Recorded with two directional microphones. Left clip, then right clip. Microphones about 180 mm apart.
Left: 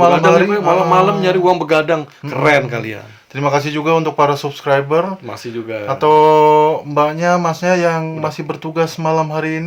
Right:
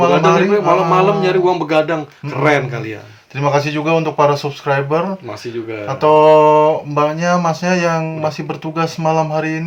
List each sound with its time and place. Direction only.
0.0 s a man's voice: 30° left (ahead or behind)